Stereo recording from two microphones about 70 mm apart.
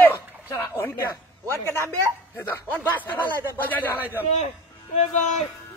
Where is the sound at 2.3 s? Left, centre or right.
Left.